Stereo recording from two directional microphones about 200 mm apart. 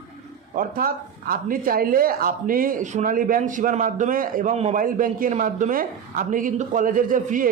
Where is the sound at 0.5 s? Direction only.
45° right (ahead or behind).